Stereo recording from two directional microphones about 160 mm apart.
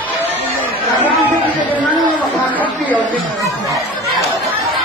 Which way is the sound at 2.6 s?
10° left (ahead or behind).